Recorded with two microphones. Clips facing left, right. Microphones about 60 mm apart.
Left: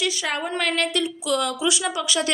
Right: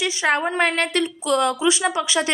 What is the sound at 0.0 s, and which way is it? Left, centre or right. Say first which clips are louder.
A woman's voice: right 5 dB; right.